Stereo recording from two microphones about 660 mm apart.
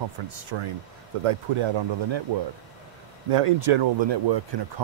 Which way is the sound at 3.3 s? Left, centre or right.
Right.